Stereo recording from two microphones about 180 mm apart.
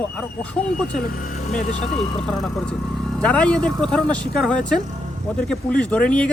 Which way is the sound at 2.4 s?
Centre (ahead or behind).